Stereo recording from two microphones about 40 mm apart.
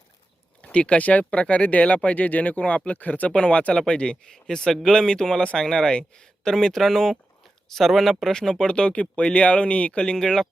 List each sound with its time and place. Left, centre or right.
0.6 s speech: left
3.3 s speech: left; by 8.1 s centre
8.2 s speech: centre; by 10.0 s left
10.0 s speech: centre